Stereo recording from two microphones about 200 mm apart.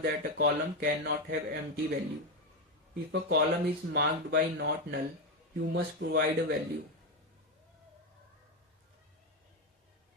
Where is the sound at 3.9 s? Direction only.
55° right (ahead or behind).